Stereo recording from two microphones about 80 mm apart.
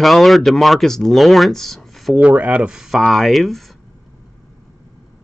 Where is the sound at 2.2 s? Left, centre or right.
Centre.